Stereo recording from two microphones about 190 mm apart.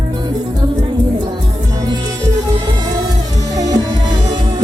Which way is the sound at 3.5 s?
20° right (ahead or behind).